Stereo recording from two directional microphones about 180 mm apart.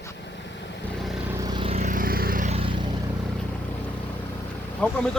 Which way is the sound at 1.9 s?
55° right (ahead or behind).